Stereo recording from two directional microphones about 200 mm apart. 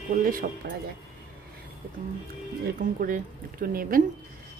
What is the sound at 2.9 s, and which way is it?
Speech, 45° right (ahead or behind).